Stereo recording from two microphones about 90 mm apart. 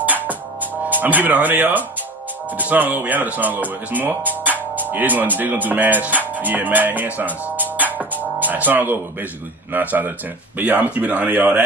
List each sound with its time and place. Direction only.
0.0 s music: 20° right (ahead or behind)
0.8 s speech: 20° right (ahead or behind)